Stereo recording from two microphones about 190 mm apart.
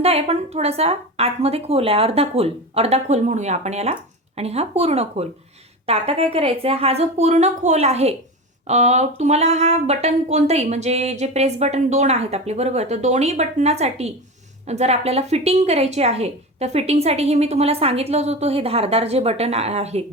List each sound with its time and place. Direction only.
0.0 s speech: 30° right (ahead or behind)